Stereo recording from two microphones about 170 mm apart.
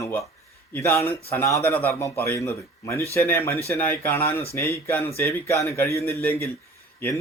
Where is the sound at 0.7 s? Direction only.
10° left (ahead or behind).